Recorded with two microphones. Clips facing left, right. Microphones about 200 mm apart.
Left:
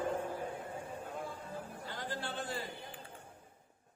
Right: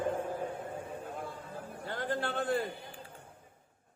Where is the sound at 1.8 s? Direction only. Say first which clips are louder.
Right 9 dB; 55° right (ahead or behind).